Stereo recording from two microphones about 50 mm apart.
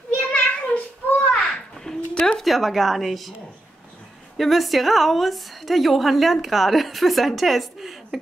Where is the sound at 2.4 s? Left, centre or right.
Centre.